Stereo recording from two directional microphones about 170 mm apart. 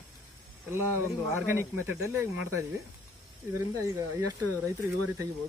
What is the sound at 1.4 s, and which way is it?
A man's voice, 15° right (ahead or behind).